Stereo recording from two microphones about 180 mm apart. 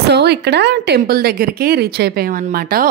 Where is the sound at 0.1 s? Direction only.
65° right (ahead or behind).